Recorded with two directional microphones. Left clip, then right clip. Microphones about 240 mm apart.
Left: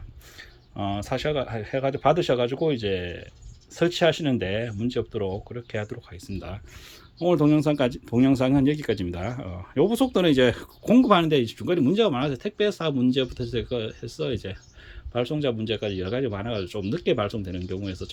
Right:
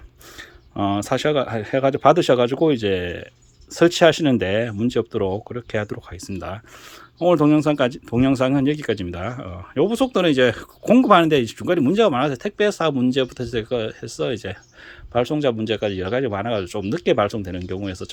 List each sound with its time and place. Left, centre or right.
0.8 s speech: right